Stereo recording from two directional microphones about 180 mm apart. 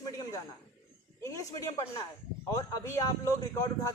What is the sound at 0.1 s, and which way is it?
Snake, 20° left (ahead or behind).